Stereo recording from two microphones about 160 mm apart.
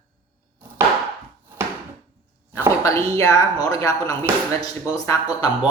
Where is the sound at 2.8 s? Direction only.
20° left (ahead or behind).